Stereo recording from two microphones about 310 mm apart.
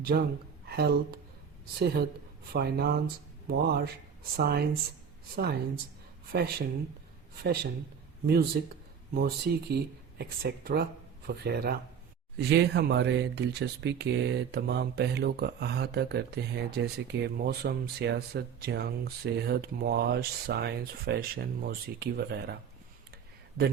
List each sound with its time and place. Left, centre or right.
0.1 s a woman's voice: right
8.6 s speech: right